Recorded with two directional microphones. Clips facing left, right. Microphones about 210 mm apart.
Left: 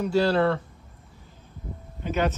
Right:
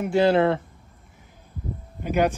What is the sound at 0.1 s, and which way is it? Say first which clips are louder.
Speech: right 4 dB; 20° right (ahead or behind).